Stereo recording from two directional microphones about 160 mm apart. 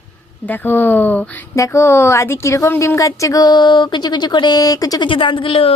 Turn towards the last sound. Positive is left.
turn(degrees=35)  # may be behind; listen again after turning